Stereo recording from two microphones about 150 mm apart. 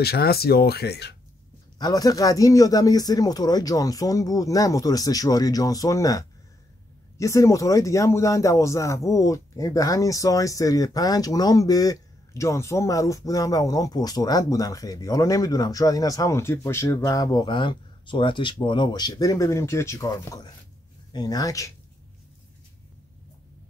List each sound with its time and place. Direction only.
0.0 s speech: 90° left
1.8 s speech: 25° left (ahead or behind)